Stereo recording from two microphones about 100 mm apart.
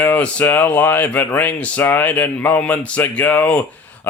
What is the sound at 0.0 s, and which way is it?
Speech, 15° left (ahead or behind).